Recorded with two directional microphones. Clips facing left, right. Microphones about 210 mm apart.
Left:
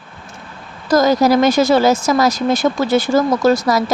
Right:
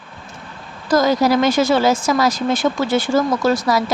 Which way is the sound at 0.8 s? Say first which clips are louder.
Left 2 dB; 40° left (ahead or behind).